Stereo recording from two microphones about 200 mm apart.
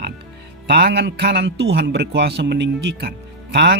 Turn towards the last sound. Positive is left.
turn(degrees=-55)  # may be behind; listen again after turning